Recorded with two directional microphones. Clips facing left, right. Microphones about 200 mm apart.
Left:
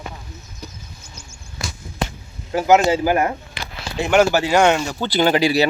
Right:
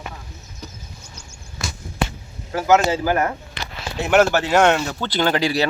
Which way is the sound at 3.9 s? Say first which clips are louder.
Left 1 dB; 5° right (ahead or behind).